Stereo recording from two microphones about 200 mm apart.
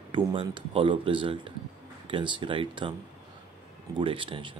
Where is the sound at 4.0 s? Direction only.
25° right (ahead or behind).